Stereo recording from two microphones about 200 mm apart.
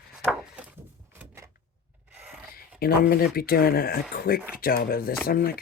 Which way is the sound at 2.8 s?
50° left (ahead or behind).